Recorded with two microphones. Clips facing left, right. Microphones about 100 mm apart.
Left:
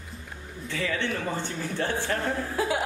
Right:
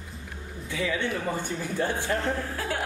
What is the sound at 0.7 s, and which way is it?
Speech, 10° right (ahead or behind).